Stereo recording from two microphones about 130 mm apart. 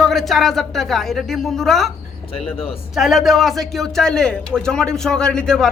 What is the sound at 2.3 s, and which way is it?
Speech, 45° left (ahead or behind).